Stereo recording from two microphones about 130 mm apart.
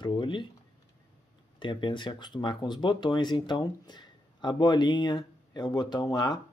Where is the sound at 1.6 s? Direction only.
40° left (ahead or behind).